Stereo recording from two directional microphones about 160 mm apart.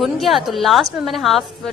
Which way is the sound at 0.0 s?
Centre (ahead or behind).